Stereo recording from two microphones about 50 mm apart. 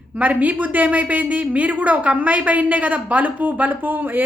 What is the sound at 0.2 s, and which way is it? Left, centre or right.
A woman's voice, right.